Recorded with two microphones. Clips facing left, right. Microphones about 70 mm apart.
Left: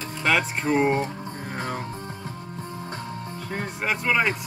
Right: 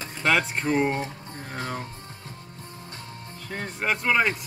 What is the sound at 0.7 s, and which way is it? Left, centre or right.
Speech, left.